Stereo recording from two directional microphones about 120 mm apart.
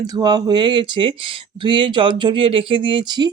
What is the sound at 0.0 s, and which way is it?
Speech, 35° right (ahead or behind).